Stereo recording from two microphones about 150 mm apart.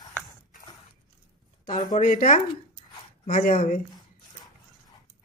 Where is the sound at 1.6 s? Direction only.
65° left (ahead or behind).